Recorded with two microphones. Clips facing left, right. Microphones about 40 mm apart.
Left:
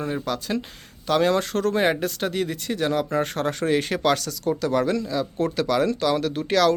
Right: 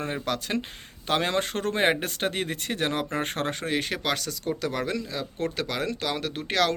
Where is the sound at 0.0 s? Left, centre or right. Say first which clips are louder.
Left 3 dB; right.